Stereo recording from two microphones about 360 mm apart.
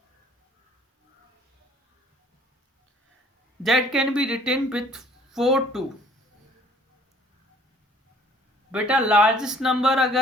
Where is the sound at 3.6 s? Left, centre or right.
Centre.